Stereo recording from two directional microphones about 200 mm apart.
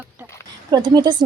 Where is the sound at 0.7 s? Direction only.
20° right (ahead or behind).